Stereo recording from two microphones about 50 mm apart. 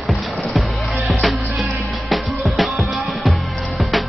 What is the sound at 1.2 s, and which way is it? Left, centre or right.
Music, centre.